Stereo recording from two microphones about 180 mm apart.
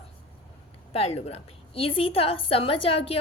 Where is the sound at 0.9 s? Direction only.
35° left (ahead or behind).